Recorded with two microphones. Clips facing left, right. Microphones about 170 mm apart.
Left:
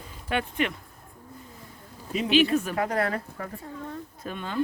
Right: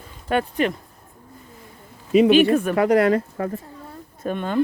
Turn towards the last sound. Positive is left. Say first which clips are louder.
# right 9 dB
turn(degrees=-50)  # may be behind; listen again after turning